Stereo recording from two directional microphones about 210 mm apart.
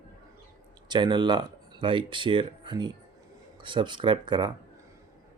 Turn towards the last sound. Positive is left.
turn(degrees=-20)  # may be behind; listen again after turning